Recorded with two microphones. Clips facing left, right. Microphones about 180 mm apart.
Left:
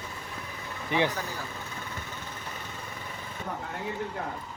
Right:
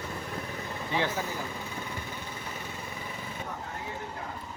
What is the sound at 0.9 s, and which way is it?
Speech, 20° left (ahead or behind).